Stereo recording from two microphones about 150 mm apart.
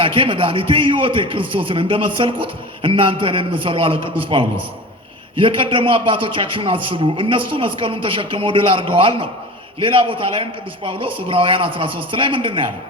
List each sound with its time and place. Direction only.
0.0 s a man's voice: 35° right (ahead or behind)